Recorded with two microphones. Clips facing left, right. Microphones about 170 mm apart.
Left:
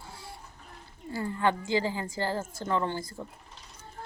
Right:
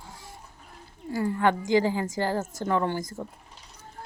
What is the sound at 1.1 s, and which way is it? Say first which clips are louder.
A woman's voice: right 4 dB; 15° right (ahead or behind).